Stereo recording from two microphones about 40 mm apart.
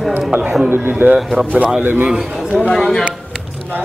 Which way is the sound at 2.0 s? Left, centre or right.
Right.